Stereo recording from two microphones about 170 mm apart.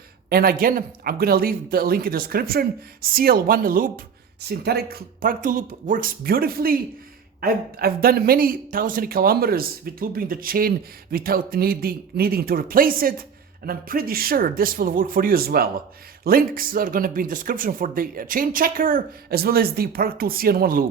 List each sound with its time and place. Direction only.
0.3 s speech: 60° right (ahead or behind)